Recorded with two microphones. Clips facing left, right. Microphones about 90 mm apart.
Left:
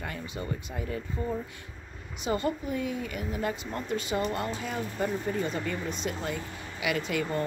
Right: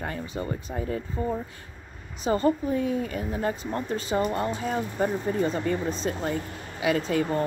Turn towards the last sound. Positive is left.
turn(degrees=-35)  # may be behind; listen again after turning